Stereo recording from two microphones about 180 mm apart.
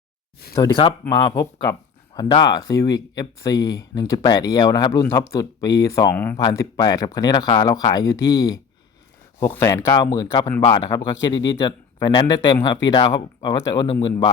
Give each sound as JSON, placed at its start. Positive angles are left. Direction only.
{"t": 0.5, "sound": "speech", "side_deg": 20}